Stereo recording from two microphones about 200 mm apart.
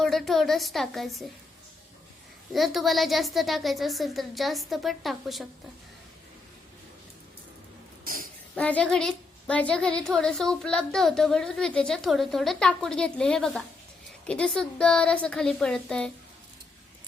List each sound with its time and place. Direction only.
0.0 s a woman's voice: centre (ahead or behind)
2.5 s a woman's voice: centre (ahead or behind)
8.0 s a sound: 45° right (ahead or behind)
8.5 s a woman's voice: 5° left (ahead or behind)